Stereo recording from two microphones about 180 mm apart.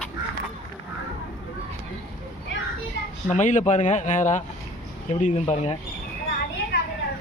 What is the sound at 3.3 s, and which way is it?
Speech, 45° left (ahead or behind).